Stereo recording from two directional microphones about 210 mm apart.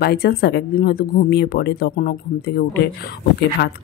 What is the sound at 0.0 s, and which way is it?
Speech, 50° left (ahead or behind).